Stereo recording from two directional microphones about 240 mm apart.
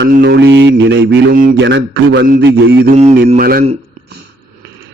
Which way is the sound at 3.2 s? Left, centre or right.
Right.